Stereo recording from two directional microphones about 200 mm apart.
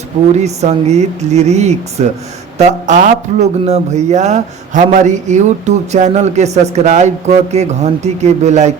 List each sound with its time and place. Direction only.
0.4 s speech: 35° right (ahead or behind)